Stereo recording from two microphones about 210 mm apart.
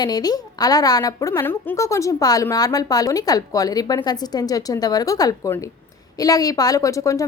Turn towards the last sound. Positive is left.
turn(degrees=15)  # may be behind; listen again after turning